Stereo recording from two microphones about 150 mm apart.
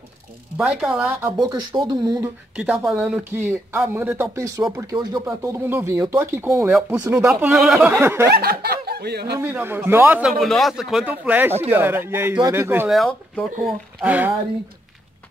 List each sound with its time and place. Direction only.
0.6 s speech: centre (ahead or behind); by 2.3 s 25° right (ahead or behind)
2.5 s speech: 5° right (ahead or behind)
7.5 s speech: centre (ahead or behind)
8.0 s speech: 15° right (ahead or behind)
8.3 s speech: 90° right
9.4 s speech: 15° right (ahead or behind)
10.4 s speech: centre (ahead or behind); by 12.9 s 15° right (ahead or behind)
12.9 s speech: centre (ahead or behind)
14.0 s speech: 10° right (ahead or behind)